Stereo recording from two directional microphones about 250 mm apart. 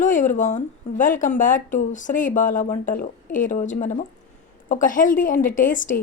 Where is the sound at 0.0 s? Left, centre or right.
Left.